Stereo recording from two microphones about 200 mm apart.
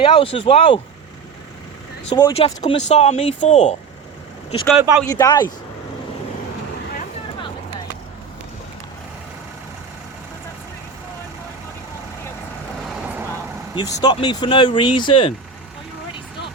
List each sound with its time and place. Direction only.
0.0 s speech: 25° left (ahead or behind)
2.0 s speech: 25° left (ahead or behind)
4.8 s speech: 5° right (ahead or behind)
5.0 s speech: 20° left (ahead or behind)
13.0 s vehicle: 10° right (ahead or behind)
13.7 s speech: 20° left (ahead or behind)